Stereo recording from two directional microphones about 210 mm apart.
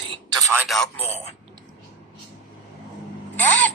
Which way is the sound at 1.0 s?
30° left (ahead or behind).